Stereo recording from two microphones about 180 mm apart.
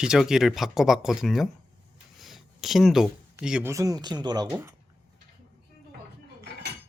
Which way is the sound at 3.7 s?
20° right (ahead or behind).